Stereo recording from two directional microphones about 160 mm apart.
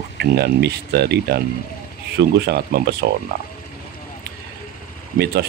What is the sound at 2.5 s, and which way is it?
Speech, 70° right (ahead or behind).